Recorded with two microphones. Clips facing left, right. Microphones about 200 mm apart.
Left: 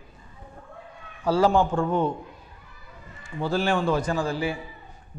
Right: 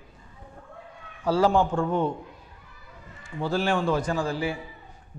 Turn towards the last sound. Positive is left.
turn(degrees=15)  # may be behind; listen again after turning